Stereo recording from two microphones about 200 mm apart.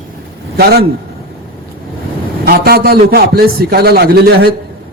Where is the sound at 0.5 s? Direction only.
50° right (ahead or behind).